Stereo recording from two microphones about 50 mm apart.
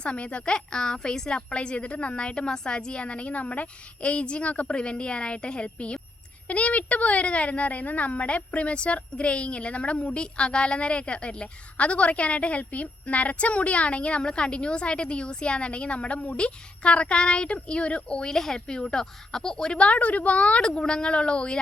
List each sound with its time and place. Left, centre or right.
0.0 s a woman's voice: left
18.3 s a woman's voice: centre